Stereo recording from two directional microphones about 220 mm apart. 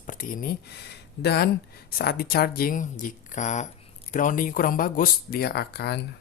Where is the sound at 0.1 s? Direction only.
40° left (ahead or behind).